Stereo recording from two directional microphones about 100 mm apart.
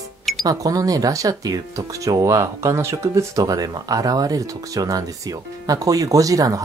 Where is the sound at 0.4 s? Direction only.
35° right (ahead or behind).